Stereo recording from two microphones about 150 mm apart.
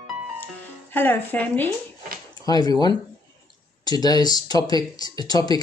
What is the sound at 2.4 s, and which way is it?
Speech, 25° left (ahead or behind).